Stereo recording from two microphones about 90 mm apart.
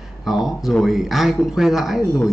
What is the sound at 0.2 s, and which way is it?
Speech, 5° right (ahead or behind).